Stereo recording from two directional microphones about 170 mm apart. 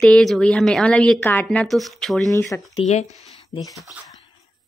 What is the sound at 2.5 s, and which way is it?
Speech, 10° left (ahead or behind).